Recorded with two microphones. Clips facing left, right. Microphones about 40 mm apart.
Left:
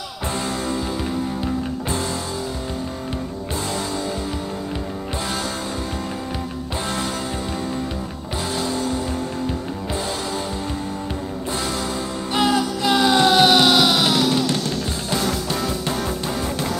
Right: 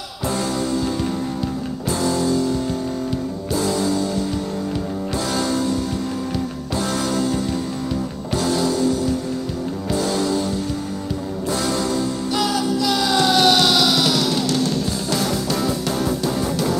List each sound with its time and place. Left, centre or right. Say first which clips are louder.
8.5 s music: right 5 dB; left
12.4 s music: left 2 dB; left